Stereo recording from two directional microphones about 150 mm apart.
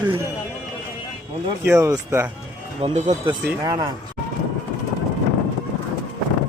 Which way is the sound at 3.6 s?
25° right (ahead or behind).